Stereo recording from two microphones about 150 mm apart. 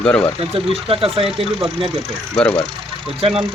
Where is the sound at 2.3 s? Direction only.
5° left (ahead or behind).